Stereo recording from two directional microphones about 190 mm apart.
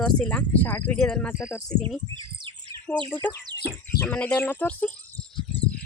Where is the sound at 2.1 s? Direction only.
25° right (ahead or behind).